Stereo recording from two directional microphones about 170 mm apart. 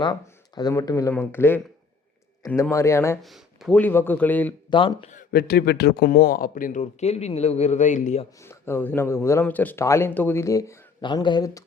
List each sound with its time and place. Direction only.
0.0 s speech: 25° left (ahead or behind)
3.2 s speech: centre (ahead or behind)
3.8 s speech: 10° left (ahead or behind)
4.7 s speech: 30° left (ahead or behind)
5.3 s a man's voice: 70° left (ahead or behind); by 8.3 s 40° left (ahead or behind)
8.4 s speech: 15° left (ahead or behind)